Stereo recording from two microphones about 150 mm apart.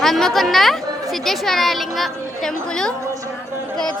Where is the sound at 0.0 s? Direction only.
Centre (ahead or behind).